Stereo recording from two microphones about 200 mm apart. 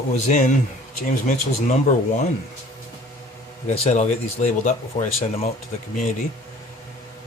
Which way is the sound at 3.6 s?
35° left (ahead or behind).